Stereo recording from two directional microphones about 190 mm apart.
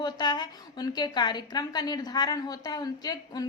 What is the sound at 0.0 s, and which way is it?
A woman's voice, 20° left (ahead or behind).